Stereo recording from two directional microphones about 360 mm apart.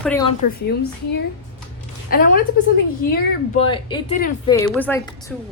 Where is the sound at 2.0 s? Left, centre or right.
Left.